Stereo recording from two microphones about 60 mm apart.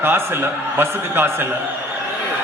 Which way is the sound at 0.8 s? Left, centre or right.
Right.